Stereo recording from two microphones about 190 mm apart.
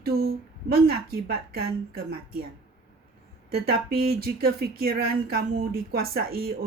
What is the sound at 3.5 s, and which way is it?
A woman's voice, 55° right (ahead or behind).